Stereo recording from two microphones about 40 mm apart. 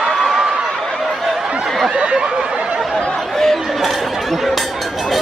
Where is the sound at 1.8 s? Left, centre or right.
Right.